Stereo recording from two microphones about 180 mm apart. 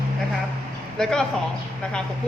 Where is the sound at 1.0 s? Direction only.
Centre (ahead or behind).